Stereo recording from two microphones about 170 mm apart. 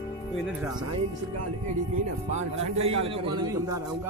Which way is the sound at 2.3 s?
35° right (ahead or behind).